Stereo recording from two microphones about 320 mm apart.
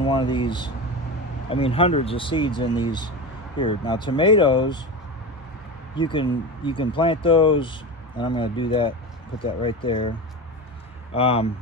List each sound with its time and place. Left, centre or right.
0.0 s speech: centre
5.9 s speech: centre
11.1 s speech: centre